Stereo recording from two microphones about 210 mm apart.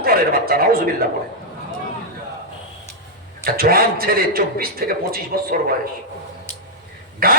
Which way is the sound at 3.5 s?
45° right (ahead or behind).